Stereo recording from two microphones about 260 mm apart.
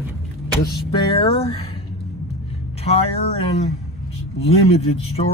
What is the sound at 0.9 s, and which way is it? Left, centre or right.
Speech, centre.